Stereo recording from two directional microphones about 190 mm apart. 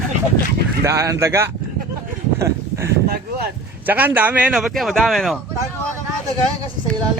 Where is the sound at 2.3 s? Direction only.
15° right (ahead or behind).